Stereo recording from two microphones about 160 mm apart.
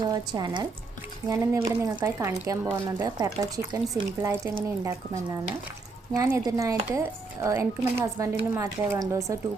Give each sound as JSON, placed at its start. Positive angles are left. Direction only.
{"t": 0.1, "sound": "speech", "side_deg": -25}